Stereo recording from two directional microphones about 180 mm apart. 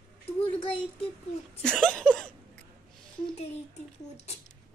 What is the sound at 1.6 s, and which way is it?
Speech, 5° left (ahead or behind).